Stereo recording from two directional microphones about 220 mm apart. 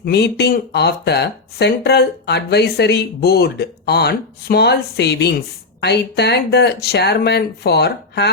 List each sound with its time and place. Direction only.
0.0 s speech: 50° left (ahead or behind)